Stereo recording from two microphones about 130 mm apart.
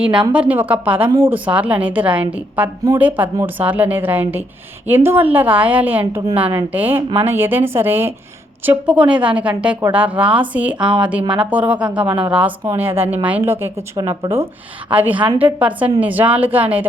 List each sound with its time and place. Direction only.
0.0 s a woman's voice: 10° right (ahead or behind)
13.9 s a woman's voice: 30° right (ahead or behind); by 16.8 s 10° right (ahead or behind)